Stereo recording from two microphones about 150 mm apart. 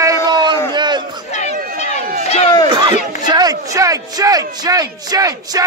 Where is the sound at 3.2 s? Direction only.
25° right (ahead or behind).